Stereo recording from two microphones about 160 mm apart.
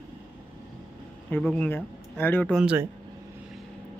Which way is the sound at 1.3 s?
5° left (ahead or behind).